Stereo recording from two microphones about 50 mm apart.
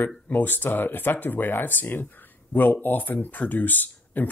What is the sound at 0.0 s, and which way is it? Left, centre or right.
Speech, left.